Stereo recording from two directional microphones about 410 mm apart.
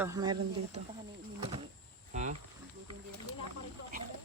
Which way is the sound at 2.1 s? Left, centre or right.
Centre.